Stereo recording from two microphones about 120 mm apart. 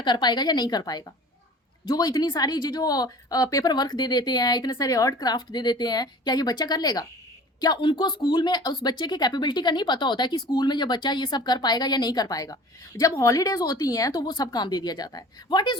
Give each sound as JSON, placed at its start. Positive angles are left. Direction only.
{"t": 0.0, "sound": "a woman's voice", "side_deg": 40}